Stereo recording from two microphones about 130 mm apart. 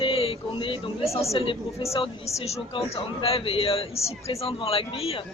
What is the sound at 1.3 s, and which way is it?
A man's voice, 45° left (ahead or behind).